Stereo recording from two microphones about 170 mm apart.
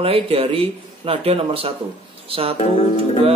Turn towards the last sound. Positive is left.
turn(degrees=35)  # may be behind; listen again after turning